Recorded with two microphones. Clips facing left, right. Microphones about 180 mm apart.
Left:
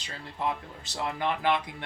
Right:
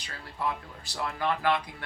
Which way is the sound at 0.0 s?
20° left (ahead or behind).